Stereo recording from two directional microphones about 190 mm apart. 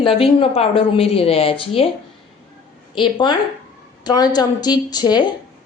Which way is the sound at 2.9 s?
25° left (ahead or behind).